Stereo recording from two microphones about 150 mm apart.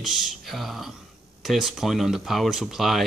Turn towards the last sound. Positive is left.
turn(degrees=0)  # may be behind; listen again after turning